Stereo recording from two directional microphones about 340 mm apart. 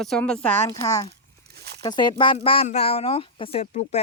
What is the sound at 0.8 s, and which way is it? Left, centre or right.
Speech, centre.